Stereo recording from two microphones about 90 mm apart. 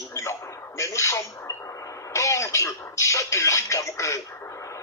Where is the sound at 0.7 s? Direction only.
35° left (ahead or behind).